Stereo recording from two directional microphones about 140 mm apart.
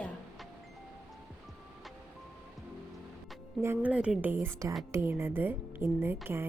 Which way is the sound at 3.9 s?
10° right (ahead or behind).